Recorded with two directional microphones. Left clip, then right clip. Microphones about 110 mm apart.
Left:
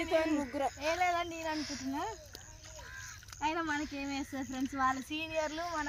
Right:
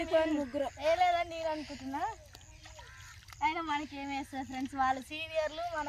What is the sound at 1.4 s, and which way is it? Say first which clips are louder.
Speech: right 1 dB; 15° right (ahead or behind).